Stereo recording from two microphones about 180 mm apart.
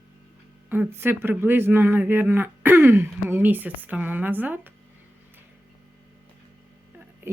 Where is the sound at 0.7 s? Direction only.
10° right (ahead or behind).